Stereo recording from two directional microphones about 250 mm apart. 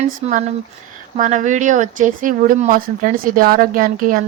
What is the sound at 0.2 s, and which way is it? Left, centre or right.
Speech, right.